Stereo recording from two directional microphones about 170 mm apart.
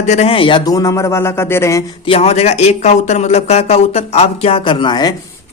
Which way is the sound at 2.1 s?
35° left (ahead or behind).